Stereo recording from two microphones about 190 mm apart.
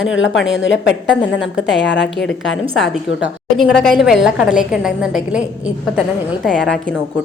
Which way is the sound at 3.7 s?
Centre (ahead or behind).